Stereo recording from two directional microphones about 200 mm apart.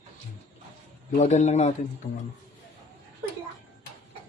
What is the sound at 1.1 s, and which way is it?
Speech, 35° left (ahead or behind).